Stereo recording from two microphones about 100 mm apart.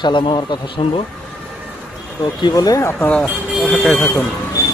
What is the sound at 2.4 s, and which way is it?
Speech, 40° left (ahead or behind).